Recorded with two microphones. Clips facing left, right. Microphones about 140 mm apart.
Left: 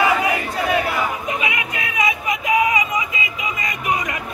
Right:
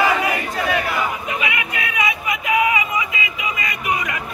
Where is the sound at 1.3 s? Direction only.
35° left (ahead or behind).